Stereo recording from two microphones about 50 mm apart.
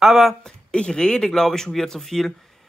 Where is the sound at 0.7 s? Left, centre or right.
Centre.